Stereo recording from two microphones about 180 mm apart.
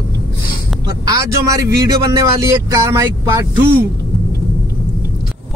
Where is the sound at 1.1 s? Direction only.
20° right (ahead or behind).